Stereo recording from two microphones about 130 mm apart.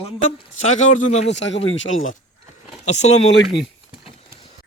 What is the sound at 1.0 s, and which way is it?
Speech, 65° left (ahead or behind).